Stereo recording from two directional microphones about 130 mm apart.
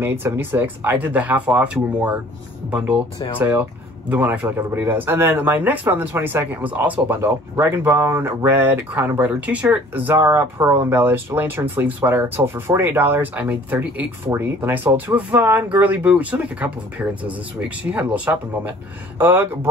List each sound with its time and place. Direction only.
0.0 s speech: 15° right (ahead or behind)
3.3 s speech: 15° right (ahead or behind)